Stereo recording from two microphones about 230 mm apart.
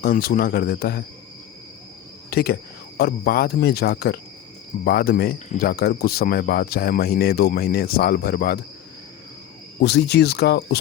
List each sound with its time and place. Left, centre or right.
0.0 s speech: left
2.3 s speech: left
9.8 s speech: left